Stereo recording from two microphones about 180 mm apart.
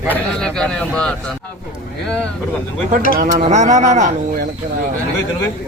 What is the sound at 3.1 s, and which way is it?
Speech, 45° right (ahead or behind).